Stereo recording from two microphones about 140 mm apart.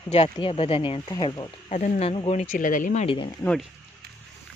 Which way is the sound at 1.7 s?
65° left (ahead or behind).